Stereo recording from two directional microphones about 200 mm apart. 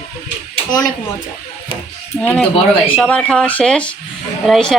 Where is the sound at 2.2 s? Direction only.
5° left (ahead or behind).